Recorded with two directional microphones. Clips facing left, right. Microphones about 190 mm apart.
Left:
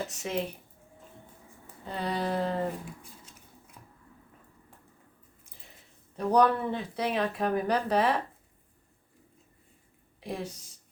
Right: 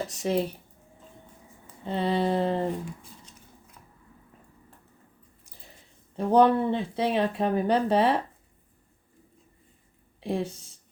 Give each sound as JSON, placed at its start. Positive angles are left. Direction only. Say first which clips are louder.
{"t": 0.1, "sound": "speech", "louder": "right 6 dB", "side_deg": -35}
{"t": 1.8, "sound": "speech", "louder": "right 6 dB", "side_deg": -25}
{"t": 3.8, "sound": "squish", "louder": "left 1 dB", "side_deg": 5}
{"t": 6.1, "sound": "speech", "louder": "right 4 dB", "side_deg": -25}
{"t": 10.2, "sound": "speech", "louder": "right 7 dB", "side_deg": -30}